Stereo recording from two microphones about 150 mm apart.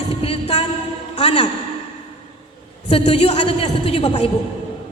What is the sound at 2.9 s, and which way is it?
A woman's voice, 45° left (ahead or behind).